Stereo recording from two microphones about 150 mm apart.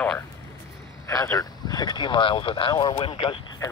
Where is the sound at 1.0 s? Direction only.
20° left (ahead or behind); by 3.3 s 35° left (ahead or behind).